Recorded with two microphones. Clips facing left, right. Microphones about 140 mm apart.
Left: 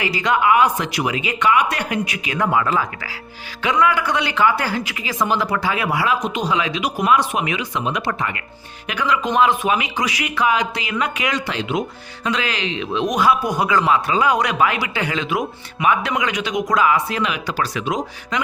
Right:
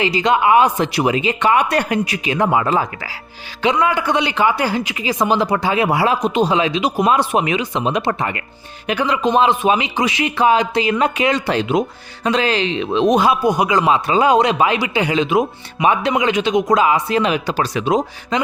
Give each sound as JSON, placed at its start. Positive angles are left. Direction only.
{"t": 0.0, "sound": "a man's voice", "side_deg": -25}